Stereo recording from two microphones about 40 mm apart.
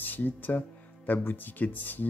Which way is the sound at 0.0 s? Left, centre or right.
Left.